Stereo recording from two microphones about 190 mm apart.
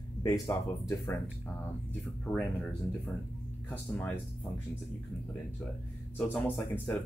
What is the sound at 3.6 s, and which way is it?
Speech, 10° left (ahead or behind).